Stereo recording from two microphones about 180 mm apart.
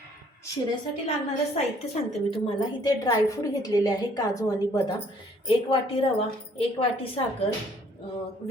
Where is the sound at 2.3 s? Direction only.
25° left (ahead or behind).